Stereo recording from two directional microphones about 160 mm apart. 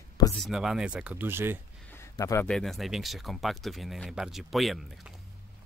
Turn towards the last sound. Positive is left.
turn(degrees=0)  # may be behind; listen again after turning